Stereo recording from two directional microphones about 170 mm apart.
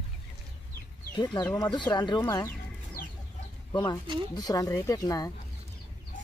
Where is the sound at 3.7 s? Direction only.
25° left (ahead or behind).